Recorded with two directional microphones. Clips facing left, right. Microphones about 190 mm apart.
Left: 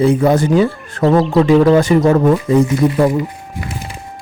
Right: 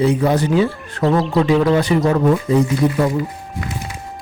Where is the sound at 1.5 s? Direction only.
35° left (ahead or behind).